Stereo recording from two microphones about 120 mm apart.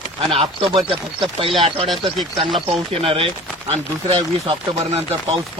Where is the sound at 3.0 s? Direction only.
50° right (ahead or behind).